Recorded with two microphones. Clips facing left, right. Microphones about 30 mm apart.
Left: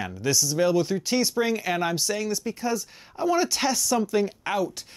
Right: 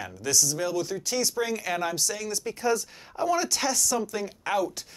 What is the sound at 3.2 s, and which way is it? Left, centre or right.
Speech, centre.